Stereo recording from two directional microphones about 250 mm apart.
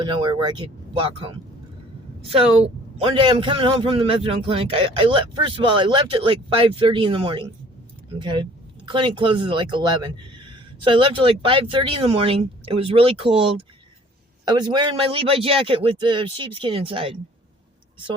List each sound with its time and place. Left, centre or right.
0.0 s speech: centre
3.0 s speech: right